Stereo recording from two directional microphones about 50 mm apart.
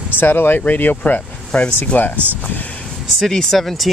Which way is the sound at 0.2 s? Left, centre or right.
Left.